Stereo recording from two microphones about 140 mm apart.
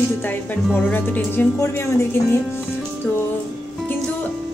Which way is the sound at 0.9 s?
15° left (ahead or behind).